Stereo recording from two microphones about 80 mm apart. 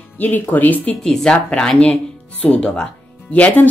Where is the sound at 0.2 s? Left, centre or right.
Left.